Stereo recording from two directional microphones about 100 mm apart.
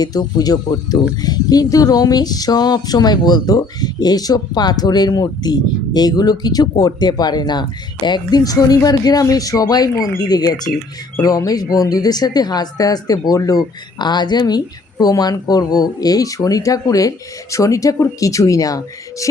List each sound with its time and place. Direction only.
0.0 s speech: 40° left (ahead or behind)